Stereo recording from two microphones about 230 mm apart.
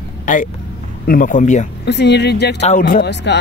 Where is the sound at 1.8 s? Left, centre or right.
Left.